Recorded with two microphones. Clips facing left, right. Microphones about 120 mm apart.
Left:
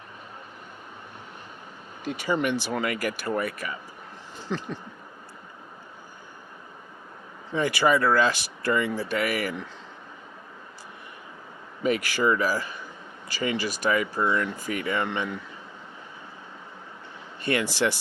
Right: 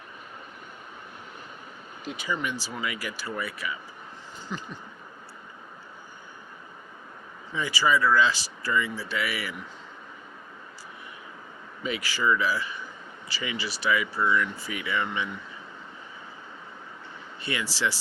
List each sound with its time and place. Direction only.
2.4 s speech: 60° left (ahead or behind)
4.4 s a sound: 75° left (ahead or behind)
7.5 s speech: 55° left (ahead or behind)
11.8 s speech: 50° left (ahead or behind)
17.4 s speech: 55° left (ahead or behind)